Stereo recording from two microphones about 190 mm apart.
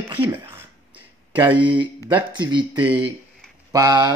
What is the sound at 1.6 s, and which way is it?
Speech, 25° right (ahead or behind).